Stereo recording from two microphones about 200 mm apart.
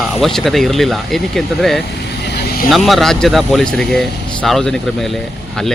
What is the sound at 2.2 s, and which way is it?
Vehicle, 50° left (ahead or behind).